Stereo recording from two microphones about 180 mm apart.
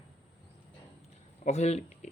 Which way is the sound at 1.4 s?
40° left (ahead or behind).